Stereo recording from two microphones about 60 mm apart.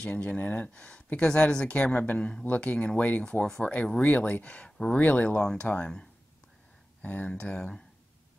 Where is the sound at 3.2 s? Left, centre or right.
Centre.